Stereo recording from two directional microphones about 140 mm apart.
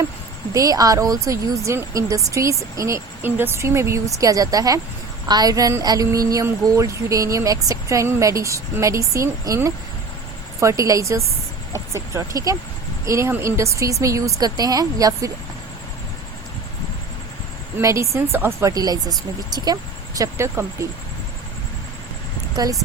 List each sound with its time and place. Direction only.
0.5 s speech: 25° right (ahead or behind)
17.7 s speech: 20° right (ahead or behind)
22.5 s speech: 25° right (ahead or behind)